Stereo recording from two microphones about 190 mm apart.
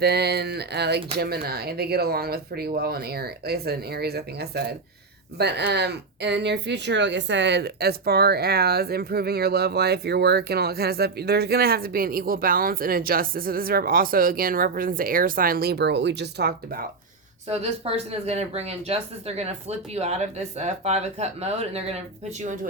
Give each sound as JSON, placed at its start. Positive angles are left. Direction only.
{"t": 0.0, "sound": "speech", "side_deg": -60}
{"t": 17.5, "sound": "speech", "side_deg": -35}